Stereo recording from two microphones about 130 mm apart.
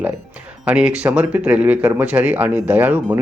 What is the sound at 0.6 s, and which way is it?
Speech, 10° right (ahead or behind).